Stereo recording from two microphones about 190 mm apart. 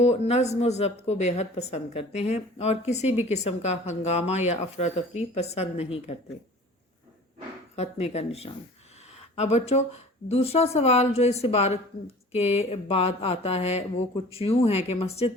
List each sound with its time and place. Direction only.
0.0 s a woman's voice: 35° left (ahead or behind)
7.8 s a woman's voice: 35° left (ahead or behind)